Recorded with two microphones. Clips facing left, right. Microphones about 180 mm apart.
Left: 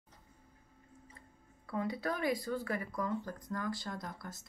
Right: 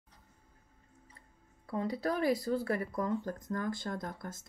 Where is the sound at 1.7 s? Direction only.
30° right (ahead or behind).